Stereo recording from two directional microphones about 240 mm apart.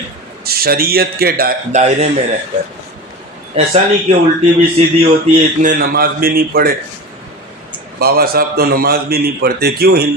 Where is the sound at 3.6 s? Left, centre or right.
Right.